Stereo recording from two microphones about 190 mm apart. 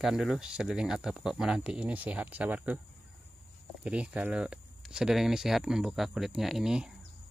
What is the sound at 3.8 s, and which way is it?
Speech, 5° right (ahead or behind).